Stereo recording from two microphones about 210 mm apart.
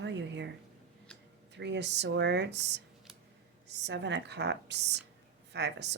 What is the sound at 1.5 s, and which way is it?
A woman's voice, 55° right (ahead or behind).